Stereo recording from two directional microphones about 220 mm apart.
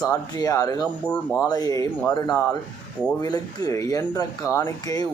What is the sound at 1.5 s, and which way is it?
Speech, 15° left (ahead or behind).